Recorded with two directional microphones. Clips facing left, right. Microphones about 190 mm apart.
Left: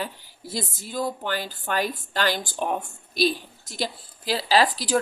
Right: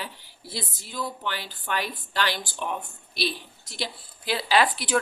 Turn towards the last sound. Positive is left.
turn(degrees=35)  # may be behind; listen again after turning